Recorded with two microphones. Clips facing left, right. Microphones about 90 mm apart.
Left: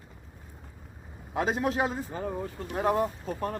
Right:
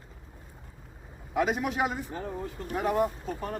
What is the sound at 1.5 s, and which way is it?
Speech, 30° left (ahead or behind).